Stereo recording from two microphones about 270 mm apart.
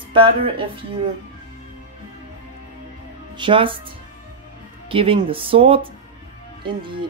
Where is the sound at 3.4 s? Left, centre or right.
Centre.